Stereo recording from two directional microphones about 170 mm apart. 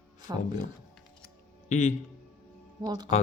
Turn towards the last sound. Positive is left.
turn(degrees=-25)  # may be behind; listen again after turning